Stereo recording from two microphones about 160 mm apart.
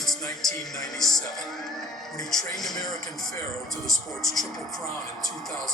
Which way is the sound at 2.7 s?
25° left (ahead or behind).